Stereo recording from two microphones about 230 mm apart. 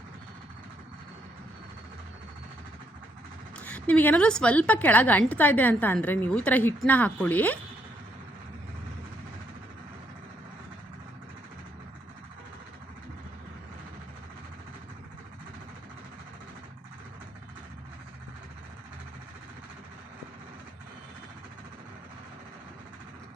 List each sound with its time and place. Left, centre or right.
3.6 s a woman's voice: centre